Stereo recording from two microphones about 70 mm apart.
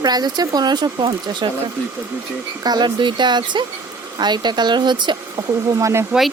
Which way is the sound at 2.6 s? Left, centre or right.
Right.